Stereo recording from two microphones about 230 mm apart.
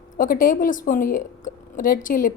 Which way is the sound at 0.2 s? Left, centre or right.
Left.